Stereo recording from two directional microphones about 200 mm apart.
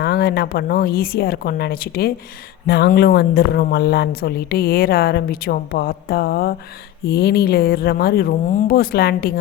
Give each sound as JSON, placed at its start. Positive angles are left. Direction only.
{"t": 0.0, "sound": "speech", "side_deg": 50}